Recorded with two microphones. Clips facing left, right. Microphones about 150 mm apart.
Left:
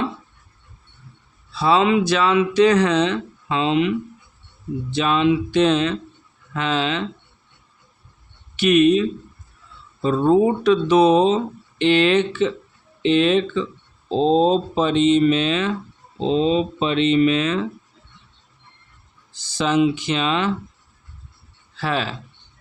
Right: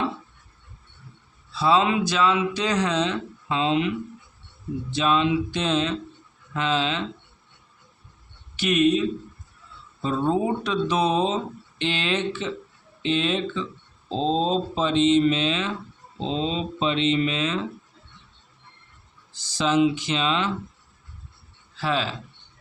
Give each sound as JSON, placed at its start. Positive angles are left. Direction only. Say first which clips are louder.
{"t": 1.5, "sound": "speech", "louder": "left 4 dB", "side_deg": 65}
{"t": 4.9, "sound": "speech", "louder": "left 4 dB", "side_deg": 65}
{"t": 8.5, "sound": "speech", "louder": "left 6 dB", "side_deg": 70}
{"t": 10.0, "sound": "speech", "louder": "left 7 dB", "side_deg": 65}
{"t": 19.4, "sound": "speech", "louder": "left 2 dB", "side_deg": 60}
{"t": 21.8, "sound": "speech", "louder": "left 2 dB", "side_deg": 60}